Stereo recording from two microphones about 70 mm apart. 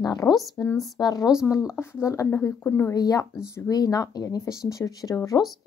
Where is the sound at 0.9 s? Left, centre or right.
Left.